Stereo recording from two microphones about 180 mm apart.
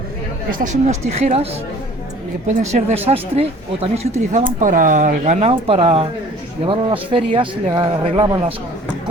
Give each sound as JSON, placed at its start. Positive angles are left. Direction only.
{"t": 0.6, "sound": "speech", "side_deg": -40}
{"t": 2.5, "sound": "speech", "side_deg": -40}